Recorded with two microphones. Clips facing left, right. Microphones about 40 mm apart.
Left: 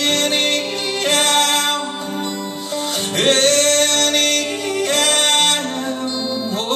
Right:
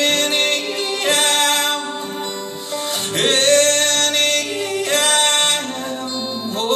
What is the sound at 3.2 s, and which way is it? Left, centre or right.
Music, right.